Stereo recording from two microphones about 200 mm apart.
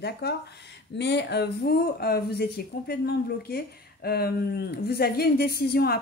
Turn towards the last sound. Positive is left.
turn(degrees=50)  # may be behind; listen again after turning